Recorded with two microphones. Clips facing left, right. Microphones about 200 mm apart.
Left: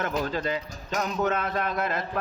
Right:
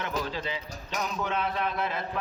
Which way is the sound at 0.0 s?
45° left (ahead or behind).